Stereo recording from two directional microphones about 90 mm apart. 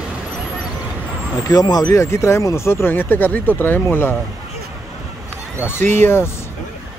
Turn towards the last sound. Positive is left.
turn(degrees=25)  # may be behind; listen again after turning